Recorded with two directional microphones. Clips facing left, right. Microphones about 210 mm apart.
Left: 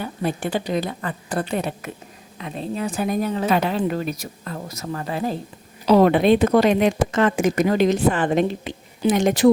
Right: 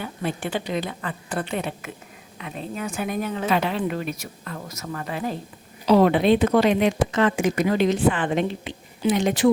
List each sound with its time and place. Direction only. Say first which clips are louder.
0.0 s a woman's voice: left 3 dB; 40° left (ahead or behind)
5.9 s speech: left 2 dB; 45° left (ahead or behind)